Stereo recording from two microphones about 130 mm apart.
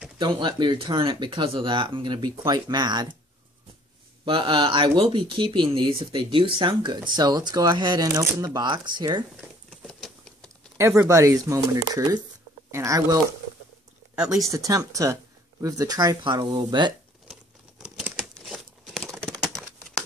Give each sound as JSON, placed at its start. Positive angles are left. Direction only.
{"t": 0.2, "sound": "speech", "side_deg": -35}
{"t": 4.2, "sound": "speech", "side_deg": -40}
{"t": 8.5, "sound": "speech", "side_deg": -35}
{"t": 9.7, "sound": "a sound", "side_deg": 0}
{"t": 10.8, "sound": "speech", "side_deg": -20}
{"t": 14.1, "sound": "speech", "side_deg": -5}
{"t": 14.5, "sound": "speech", "side_deg": -25}
{"t": 17.3, "sound": "crumpling", "side_deg": -5}